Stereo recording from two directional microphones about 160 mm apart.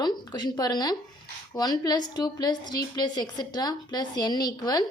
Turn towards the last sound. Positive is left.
turn(degrees=25)  # may be behind; listen again after turning